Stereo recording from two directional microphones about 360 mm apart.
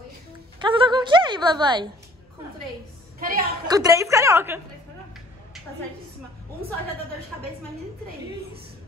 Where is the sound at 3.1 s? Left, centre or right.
Right.